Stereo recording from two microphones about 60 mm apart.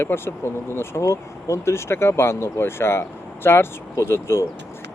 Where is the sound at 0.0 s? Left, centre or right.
Left.